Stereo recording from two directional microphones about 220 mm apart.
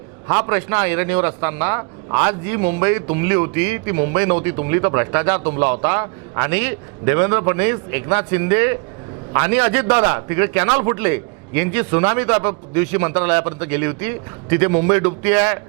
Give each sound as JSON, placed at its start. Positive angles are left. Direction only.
{"t": 0.3, "sound": "a man's voice", "side_deg": -20}